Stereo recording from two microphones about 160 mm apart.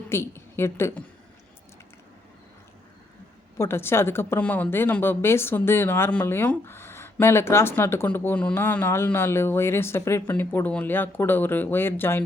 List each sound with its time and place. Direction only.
0.1 s a woman's voice: 15° left (ahead or behind)
3.6 s a woman's voice: 15° left (ahead or behind)